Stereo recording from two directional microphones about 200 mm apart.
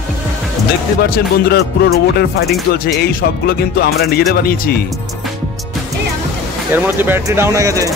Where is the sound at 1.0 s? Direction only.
55° left (ahead or behind).